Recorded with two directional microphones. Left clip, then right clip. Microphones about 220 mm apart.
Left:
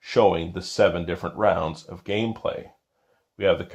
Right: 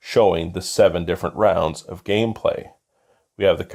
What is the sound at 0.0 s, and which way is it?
Speech, 40° right (ahead or behind).